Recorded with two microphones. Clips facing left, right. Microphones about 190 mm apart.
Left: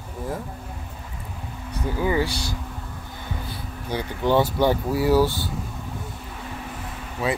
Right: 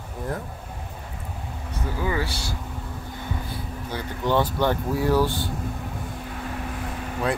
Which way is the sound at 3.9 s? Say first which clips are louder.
Left 3 dB; 15° left (ahead or behind).